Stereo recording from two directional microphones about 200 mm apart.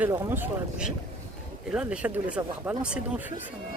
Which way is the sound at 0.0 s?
10° right (ahead or behind).